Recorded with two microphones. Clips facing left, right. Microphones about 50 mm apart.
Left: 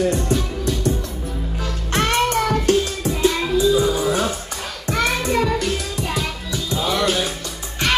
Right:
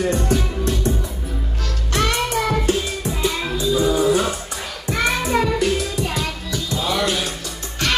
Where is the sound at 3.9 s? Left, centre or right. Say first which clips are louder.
Right 2 dB; centre.